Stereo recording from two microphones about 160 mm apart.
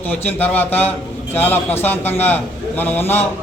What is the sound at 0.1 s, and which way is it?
A man's voice, 10° left (ahead or behind).